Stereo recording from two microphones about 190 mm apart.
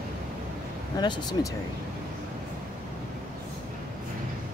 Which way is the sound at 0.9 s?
20° left (ahead or behind).